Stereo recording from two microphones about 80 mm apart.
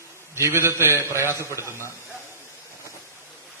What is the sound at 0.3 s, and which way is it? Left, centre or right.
A man's voice, right.